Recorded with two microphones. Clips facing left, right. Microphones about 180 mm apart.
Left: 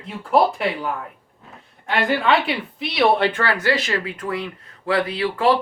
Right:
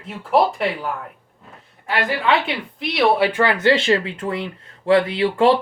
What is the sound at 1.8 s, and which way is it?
Speech, centre (ahead or behind).